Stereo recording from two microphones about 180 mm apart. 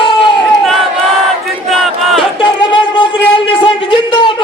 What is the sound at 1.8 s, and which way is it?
Battle cry, centre (ahead or behind).